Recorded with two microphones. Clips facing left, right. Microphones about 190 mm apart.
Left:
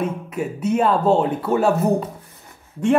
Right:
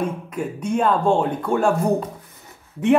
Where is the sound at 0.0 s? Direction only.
5° left (ahead or behind).